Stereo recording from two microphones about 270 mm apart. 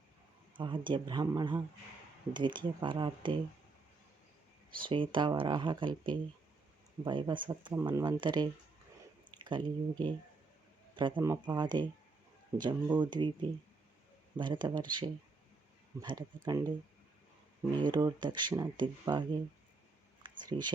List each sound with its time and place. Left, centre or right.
0.5 s speech: centre
4.8 s speech: centre
7.0 s speech: centre
14.3 s speech: centre
17.7 s speech: centre
20.5 s speech: centre